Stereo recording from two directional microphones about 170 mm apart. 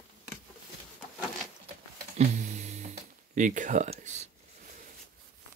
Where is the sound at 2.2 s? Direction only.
40° right (ahead or behind).